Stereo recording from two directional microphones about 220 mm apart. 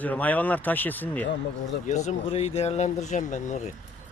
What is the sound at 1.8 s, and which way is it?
Speech, 30° left (ahead or behind).